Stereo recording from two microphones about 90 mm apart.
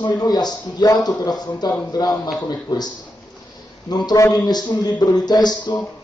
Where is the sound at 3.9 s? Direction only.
50° left (ahead or behind).